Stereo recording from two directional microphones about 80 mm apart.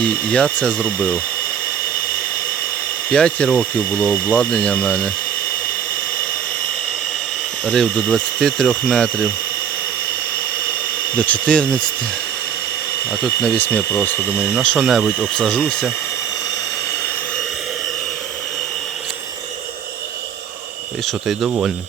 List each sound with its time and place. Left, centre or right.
0.0 s speech: centre
3.1 s speech: centre
7.6 s speech: centre
8.7 s speech: centre
11.2 s speech: centre
13.1 s speech: centre
14.8 s speech: centre
21.1 s speech: centre